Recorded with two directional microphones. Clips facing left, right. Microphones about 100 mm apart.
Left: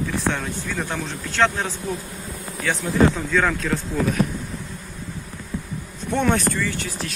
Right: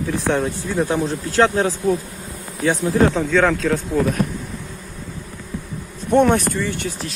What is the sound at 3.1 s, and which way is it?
Speech, 70° right (ahead or behind).